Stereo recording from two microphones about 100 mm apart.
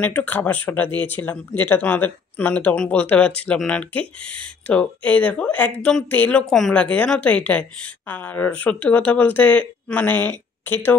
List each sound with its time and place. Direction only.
0.0 s a woman's voice: 15° left (ahead or behind)
6.4 s a woman's voice: 5° left (ahead or behind); by 11.0 s 20° left (ahead or behind)